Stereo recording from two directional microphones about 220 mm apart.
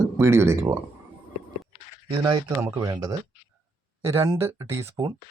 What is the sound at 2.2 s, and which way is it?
Speech, 20° right (ahead or behind).